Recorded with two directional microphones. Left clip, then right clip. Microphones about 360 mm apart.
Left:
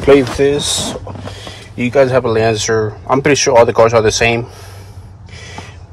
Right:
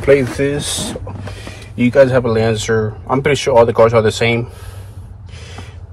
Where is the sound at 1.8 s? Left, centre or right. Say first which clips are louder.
Even; centre.